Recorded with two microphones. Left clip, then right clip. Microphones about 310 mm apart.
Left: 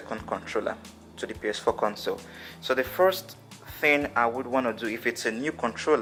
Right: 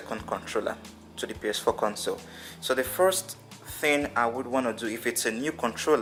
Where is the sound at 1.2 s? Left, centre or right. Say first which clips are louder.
Even; centre.